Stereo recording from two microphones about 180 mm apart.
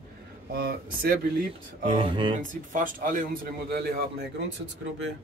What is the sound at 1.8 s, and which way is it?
Speech, 30° right (ahead or behind).